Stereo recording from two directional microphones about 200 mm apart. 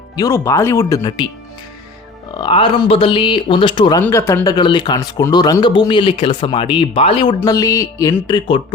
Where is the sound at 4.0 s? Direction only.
15° left (ahead or behind).